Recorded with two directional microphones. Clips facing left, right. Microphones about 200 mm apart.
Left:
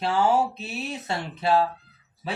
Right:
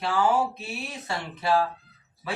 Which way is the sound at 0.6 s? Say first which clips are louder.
Left 3 dB; 25° left (ahead or behind).